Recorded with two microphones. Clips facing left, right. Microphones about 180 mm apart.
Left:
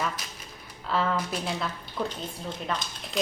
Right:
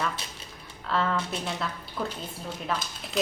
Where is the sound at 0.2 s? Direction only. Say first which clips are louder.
Right 1 dB; 30° right (ahead or behind).